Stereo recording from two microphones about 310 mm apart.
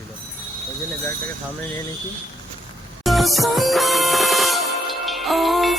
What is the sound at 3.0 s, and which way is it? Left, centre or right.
Music, centre.